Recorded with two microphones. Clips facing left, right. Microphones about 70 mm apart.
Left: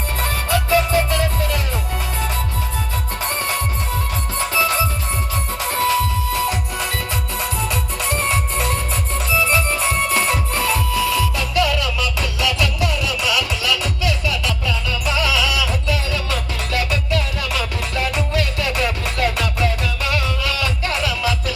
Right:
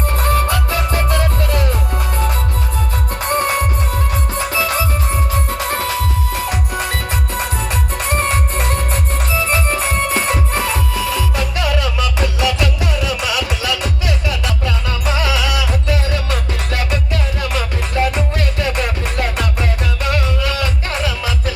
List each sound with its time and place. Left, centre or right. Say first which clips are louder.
0.2 s music: right 3 dB; right
3.2 s music: right 8 dB; right
5.5 s music: left 5 dB; right
7.3 s music: right 1 dB; right